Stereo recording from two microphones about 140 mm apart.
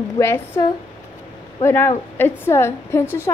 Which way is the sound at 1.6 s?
15° left (ahead or behind).